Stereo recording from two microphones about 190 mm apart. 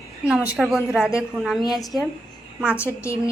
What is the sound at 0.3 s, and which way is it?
A woman's voice, 5° right (ahead or behind).